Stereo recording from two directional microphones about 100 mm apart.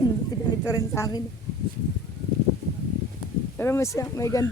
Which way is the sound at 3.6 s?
25° left (ahead or behind).